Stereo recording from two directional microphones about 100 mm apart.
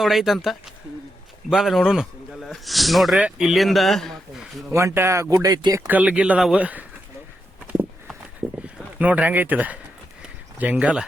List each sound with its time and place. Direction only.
0.0 s speech: centre (ahead or behind)
4.7 s speech: 25° right (ahead or behind)
5.9 s speech: 10° right (ahead or behind)
7.7 s a sound: 15° right (ahead or behind)
10.6 s speech: 15° right (ahead or behind)